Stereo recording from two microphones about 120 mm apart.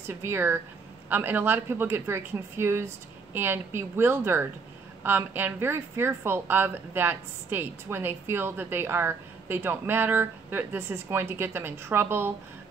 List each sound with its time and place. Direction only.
0.0 s a woman's voice: 20° right (ahead or behind)